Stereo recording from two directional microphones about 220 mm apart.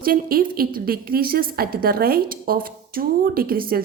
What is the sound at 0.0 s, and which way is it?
A woman's voice, 40° right (ahead or behind).